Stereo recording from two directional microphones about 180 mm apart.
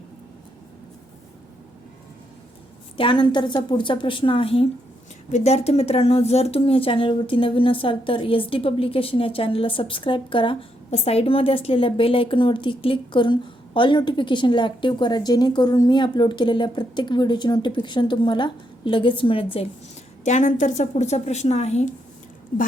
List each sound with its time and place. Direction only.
3.0 s speech: 25° left (ahead or behind)
20.2 s a woman's voice: 40° left (ahead or behind)